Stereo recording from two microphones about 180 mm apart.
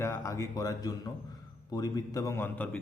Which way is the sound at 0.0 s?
15° left (ahead or behind).